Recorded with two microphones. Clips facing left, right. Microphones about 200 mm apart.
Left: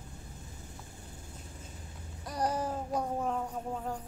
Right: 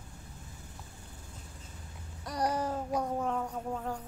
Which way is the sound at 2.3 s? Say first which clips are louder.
Right 1 dB; 10° left (ahead or behind).